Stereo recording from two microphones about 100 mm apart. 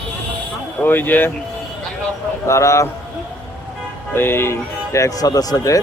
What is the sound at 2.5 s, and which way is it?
Speech, 30° left (ahead or behind).